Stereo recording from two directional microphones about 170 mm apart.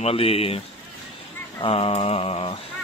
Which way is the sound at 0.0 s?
35° left (ahead or behind).